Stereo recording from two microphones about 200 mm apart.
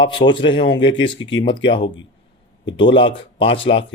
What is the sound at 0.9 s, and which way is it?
Speech, 70° left (ahead or behind).